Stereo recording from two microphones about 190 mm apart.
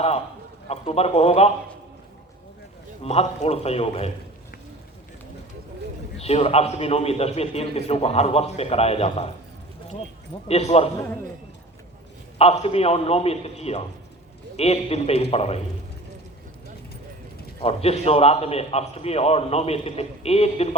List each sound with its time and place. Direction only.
0.7 s a man's voice: 35° left (ahead or behind)
3.0 s a man's voice: 35° left (ahead or behind)
6.1 s a man's voice: 30° left (ahead or behind)
10.5 s a man's voice: 35° left (ahead or behind)
12.4 s a man's voice: 30° left (ahead or behind)
17.6 s a man's voice: 30° left (ahead or behind)